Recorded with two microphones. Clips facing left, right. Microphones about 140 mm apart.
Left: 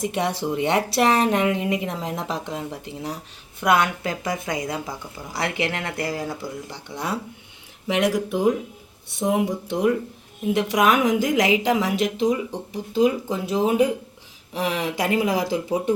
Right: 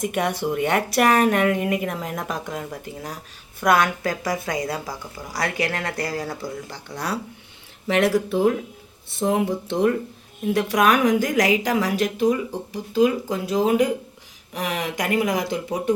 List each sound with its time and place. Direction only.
0.0 s a woman's voice: 25° left (ahead or behind); by 9.9 s 10° left (ahead or behind)
10.5 s a woman's voice: 20° left (ahead or behind)